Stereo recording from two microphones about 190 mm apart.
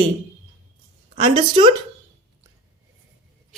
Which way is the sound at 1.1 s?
25° right (ahead or behind).